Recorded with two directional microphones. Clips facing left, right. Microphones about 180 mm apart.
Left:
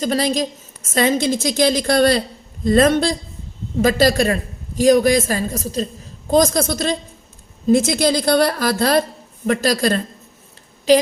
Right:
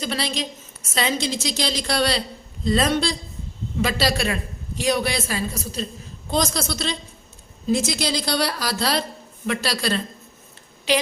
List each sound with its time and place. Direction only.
0.0 s a woman's voice: 45° left (ahead or behind)